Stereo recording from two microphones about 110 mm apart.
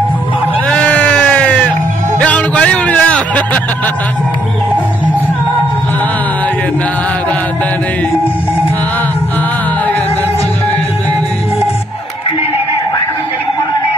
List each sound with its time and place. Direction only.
0.7 s sheep: 10° left (ahead or behind)
2.1 s music: 15° left (ahead or behind)